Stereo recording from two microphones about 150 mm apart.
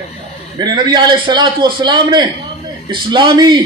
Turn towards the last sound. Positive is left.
turn(degrees=-30)  # may be behind; listen again after turning